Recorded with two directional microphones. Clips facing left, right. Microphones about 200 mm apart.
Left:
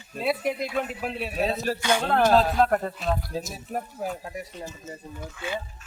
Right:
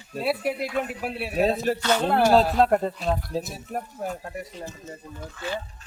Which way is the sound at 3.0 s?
Centre (ahead or behind).